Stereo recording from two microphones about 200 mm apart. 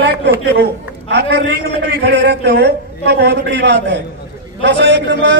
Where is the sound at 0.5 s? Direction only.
55° right (ahead or behind).